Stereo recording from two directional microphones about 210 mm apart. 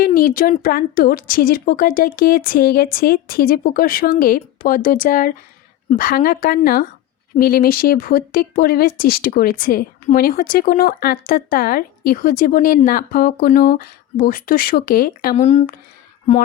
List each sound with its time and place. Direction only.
0.0 s speech: 45° left (ahead or behind)